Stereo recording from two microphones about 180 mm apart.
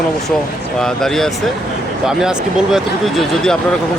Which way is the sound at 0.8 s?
5° left (ahead or behind).